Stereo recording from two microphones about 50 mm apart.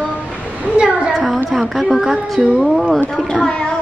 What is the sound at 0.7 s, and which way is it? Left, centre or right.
Speech, right.